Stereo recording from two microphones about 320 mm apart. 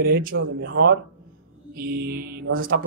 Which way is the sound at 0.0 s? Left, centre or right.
Right.